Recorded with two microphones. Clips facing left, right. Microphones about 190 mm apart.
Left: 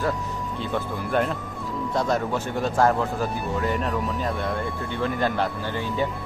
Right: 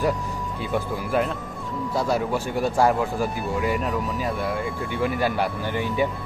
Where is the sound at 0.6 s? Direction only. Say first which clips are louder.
Right 2 dB; 5° right (ahead or behind).